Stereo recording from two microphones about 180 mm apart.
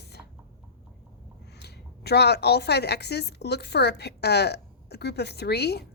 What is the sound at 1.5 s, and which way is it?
A woman's voice, 65° left (ahead or behind).